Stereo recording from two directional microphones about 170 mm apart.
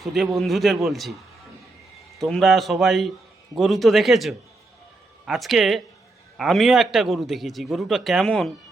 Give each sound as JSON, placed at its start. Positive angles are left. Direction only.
{"t": 0.0, "sound": "a man's voice", "side_deg": 0}
{"t": 2.1, "sound": "a man's voice", "side_deg": 0}